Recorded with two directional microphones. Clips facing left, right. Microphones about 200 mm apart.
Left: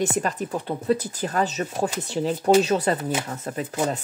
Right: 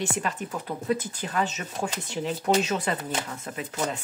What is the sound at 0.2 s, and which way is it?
Speech, 35° left (ahead or behind).